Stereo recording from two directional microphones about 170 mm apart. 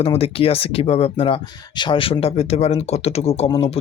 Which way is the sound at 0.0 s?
35° left (ahead or behind).